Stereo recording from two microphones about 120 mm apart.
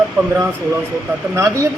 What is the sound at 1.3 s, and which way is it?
Speech, 25° right (ahead or behind).